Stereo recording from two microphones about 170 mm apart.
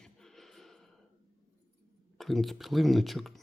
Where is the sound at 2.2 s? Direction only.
Centre (ahead or behind).